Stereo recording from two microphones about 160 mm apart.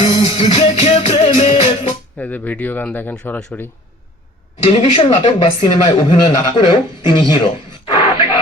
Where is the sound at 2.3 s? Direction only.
10° left (ahead or behind).